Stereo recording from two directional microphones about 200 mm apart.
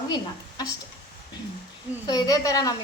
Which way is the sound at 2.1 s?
20° left (ahead or behind).